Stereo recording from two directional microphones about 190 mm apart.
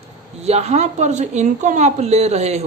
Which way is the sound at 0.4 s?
35° right (ahead or behind).